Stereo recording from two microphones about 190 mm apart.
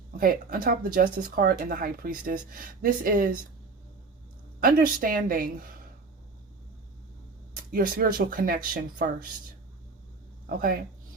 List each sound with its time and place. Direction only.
0.2 s speech: 50° right (ahead or behind)
4.6 s speech: 45° right (ahead or behind)
7.5 s speech: 50° right (ahead or behind)
10.4 s speech: 50° right (ahead or behind)